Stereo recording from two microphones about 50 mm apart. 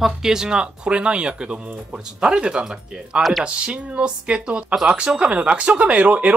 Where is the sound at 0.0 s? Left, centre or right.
Centre.